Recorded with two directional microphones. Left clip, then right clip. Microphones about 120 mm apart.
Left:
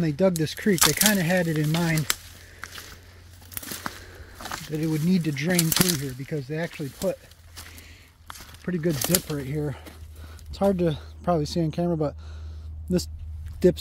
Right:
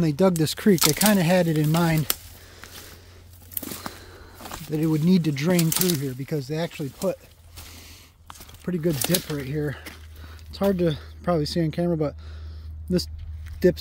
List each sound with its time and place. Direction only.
0.0 s speech: 45° right (ahead or behind)
0.4 s speech: 65° right (ahead or behind)
2.6 s a sound: 5° left (ahead or behind)
4.6 s speech: 65° right (ahead or behind); by 5.5 s 90° right
5.5 s speech: 55° right (ahead or behind)
6.4 s speech: 30° right (ahead or behind)
8.6 s speech: 10° right (ahead or behind)